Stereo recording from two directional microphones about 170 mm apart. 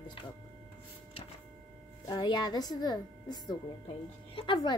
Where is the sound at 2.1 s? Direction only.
25° left (ahead or behind).